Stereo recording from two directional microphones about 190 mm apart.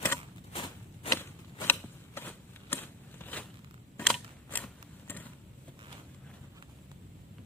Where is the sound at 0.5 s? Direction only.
25° left (ahead or behind).